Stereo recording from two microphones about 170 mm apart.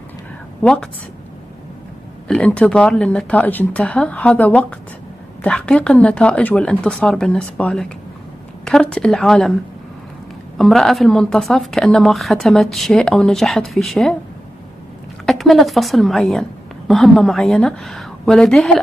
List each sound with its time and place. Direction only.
0.6 s a woman's voice: 5° left (ahead or behind)
2.2 s a woman's voice: 5° left (ahead or behind)
10.6 s a woman's voice: centre (ahead or behind)
15.2 s a woman's voice: centre (ahead or behind)